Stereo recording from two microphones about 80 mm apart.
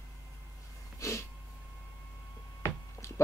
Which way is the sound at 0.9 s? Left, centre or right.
Left.